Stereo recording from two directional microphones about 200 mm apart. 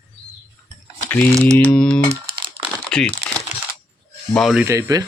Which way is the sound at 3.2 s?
60° right (ahead or behind).